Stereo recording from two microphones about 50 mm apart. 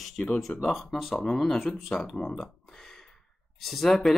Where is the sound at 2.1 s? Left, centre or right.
Centre.